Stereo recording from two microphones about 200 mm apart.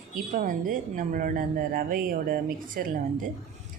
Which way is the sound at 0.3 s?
40° right (ahead or behind).